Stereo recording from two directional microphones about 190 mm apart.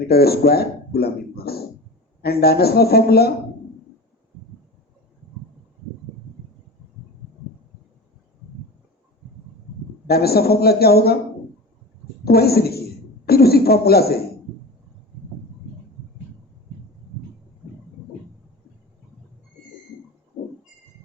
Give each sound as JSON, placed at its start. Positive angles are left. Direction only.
{"t": 0.1, "sound": "a man's voice", "side_deg": 55}
{"t": 10.1, "sound": "a man's voice", "side_deg": 55}
{"t": 12.2, "sound": "a man's voice", "side_deg": 55}